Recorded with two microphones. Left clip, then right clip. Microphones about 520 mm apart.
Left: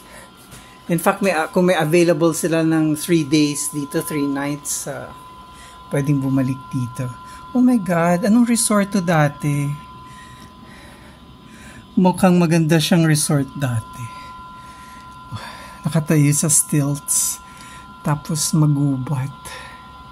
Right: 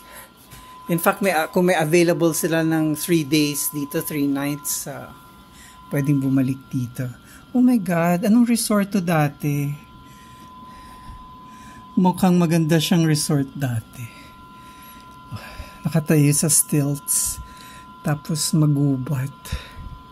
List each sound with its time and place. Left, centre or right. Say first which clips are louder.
0.8 s speech: left 2 dB; right
12.0 s speech: left 4 dB; right
15.3 s speech: left 4 dB; right
18.0 s speech: left 2 dB; right